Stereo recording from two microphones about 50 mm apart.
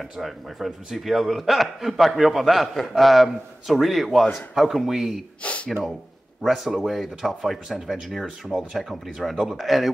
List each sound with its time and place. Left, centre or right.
0.2 s a man's voice: centre
5.4 s gasp: left
6.4 s a man's voice: centre